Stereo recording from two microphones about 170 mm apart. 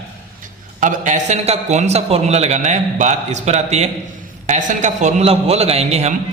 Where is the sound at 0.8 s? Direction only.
50° right (ahead or behind).